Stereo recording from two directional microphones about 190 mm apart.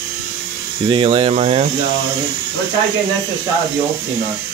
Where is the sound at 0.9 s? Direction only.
25° right (ahead or behind).